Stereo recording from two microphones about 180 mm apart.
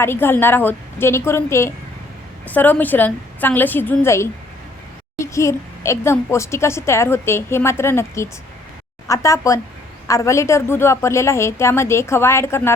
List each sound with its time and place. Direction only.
0.0 s a woman's voice: 10° left (ahead or behind)